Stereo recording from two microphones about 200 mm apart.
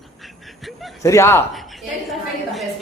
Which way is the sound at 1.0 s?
15° left (ahead or behind).